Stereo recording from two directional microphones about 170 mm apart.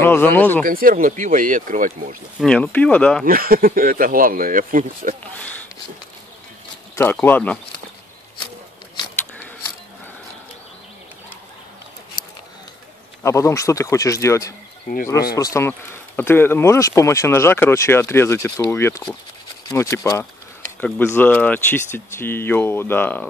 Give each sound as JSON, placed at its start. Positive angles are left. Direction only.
{"t": 0.0, "sound": "speech", "side_deg": 15}
{"t": 0.7, "sound": "speech", "side_deg": -55}
{"t": 2.4, "sound": "speech", "side_deg": 5}
{"t": 3.3, "sound": "speech", "side_deg": -60}
{"t": 7.0, "sound": "speech", "side_deg": 10}
{"t": 13.2, "sound": "speech", "side_deg": 15}